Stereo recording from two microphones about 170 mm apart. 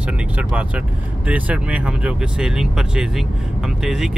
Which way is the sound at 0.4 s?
5° right (ahead or behind).